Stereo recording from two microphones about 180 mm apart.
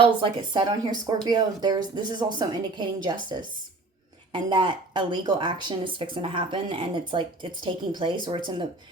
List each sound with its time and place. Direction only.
0.0 s speech: 25° right (ahead or behind)
4.3 s speech: 25° right (ahead or behind)